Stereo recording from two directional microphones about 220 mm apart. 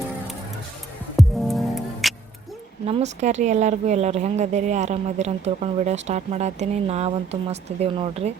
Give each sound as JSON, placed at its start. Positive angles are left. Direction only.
{"t": 1.1, "sound": "music", "side_deg": 0}
{"t": 2.8, "sound": "speech", "side_deg": -30}